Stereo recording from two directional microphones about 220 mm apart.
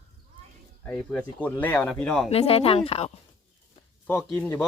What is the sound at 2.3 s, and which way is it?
Speech, 25° left (ahead or behind).